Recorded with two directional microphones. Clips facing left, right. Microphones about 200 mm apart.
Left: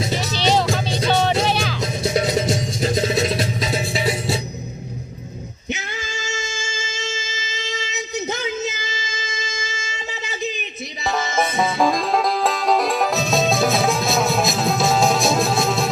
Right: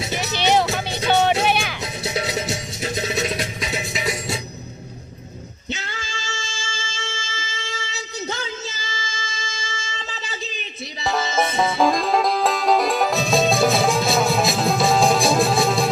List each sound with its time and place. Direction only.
0.2 s music: 5° right (ahead or behind)
1.8 s music: 45° left (ahead or behind); by 4.4 s 25° left (ahead or behind)
5.7 s music: 20° left (ahead or behind)
11.8 s music: centre (ahead or behind)